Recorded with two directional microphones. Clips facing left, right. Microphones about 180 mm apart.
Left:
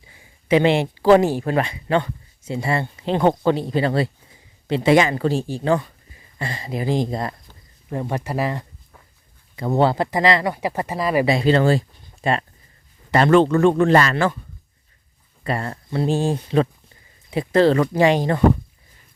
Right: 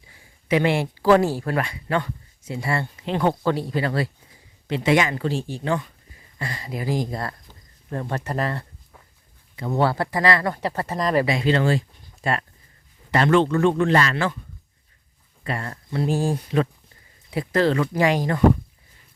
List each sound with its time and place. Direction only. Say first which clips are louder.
0.4 s speech: left 4 dB; 25° left (ahead or behind)
6.4 s speech: left 4 dB; 25° left (ahead or behind)
9.7 s speech: left 3 dB; 20° left (ahead or behind)
11.3 s speech: left 4 dB; 35° left (ahead or behind)
12.2 s speech: left 3 dB; 25° left (ahead or behind)
13.1 s a man's voice: left 4 dB; 40° left (ahead or behind)
15.4 s speech: left 4 dB; 30° left (ahead or behind)